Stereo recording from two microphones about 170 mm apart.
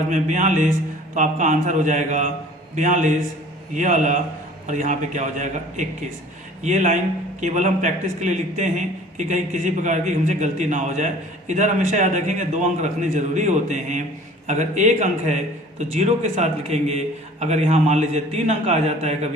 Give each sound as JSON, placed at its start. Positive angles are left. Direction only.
{"t": 0.1, "sound": "a man's voice", "side_deg": -45}